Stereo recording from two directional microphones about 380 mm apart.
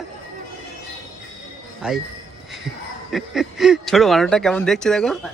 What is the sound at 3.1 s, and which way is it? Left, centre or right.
A child's voice, centre.